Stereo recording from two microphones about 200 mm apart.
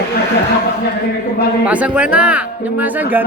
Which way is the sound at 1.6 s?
5° right (ahead or behind).